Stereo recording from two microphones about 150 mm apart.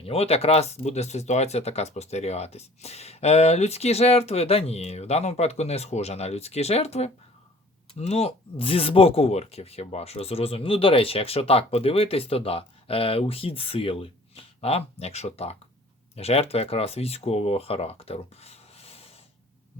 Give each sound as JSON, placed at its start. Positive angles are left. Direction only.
{"t": 0.0, "sound": "speech", "side_deg": 40}